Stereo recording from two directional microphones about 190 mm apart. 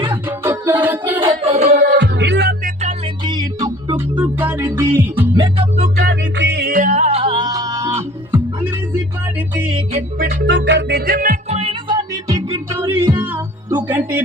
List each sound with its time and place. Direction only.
0.3 s music: 15° right (ahead or behind)
1.5 s music: 35° right (ahead or behind)
1.7 s music: 60° right (ahead or behind)
3.2 s music: 20° right (ahead or behind)
5.4 s music: 30° right (ahead or behind)
6.0 s music: 65° right (ahead or behind); by 8.4 s 15° right (ahead or behind)
9.9 s music: 60° right (ahead or behind)
11.4 s music: 35° right (ahead or behind); by 14.2 s 10° right (ahead or behind)